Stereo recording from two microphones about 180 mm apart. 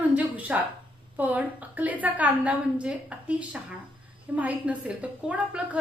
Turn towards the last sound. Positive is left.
turn(degrees=-5)  # may be behind; listen again after turning